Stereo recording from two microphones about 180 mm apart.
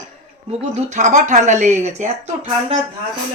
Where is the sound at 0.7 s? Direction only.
40° right (ahead or behind).